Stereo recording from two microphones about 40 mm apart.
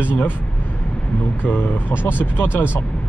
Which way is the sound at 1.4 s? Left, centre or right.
Left.